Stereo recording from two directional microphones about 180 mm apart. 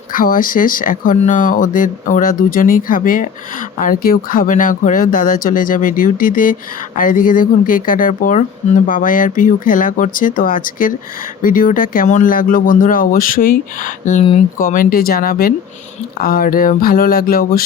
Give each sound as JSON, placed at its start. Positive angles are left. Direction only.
{"t": 0.1, "sound": "speech", "side_deg": 50}